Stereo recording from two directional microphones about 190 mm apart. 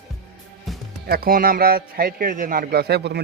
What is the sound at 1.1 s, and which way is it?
A man's voice, 50° right (ahead or behind).